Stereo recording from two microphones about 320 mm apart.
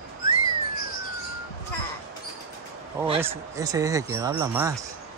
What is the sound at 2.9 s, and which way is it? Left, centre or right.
Speech, centre.